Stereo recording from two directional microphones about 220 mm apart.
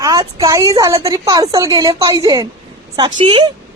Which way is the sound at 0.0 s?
15° right (ahead or behind).